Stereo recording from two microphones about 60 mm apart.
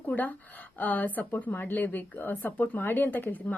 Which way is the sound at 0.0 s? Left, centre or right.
Left.